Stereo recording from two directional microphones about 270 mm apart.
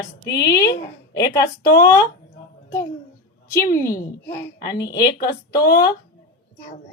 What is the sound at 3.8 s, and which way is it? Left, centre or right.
A woman's voice, centre.